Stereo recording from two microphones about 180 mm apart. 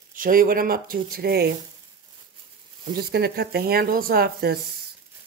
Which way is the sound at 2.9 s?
60° right (ahead or behind).